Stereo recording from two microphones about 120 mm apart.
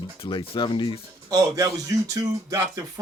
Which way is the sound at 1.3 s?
30° right (ahead or behind).